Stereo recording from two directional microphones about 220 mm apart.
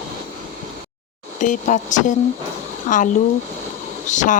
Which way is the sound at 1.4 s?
35° left (ahead or behind).